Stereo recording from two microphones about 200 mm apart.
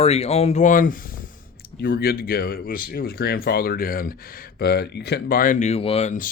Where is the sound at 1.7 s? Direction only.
55° left (ahead or behind).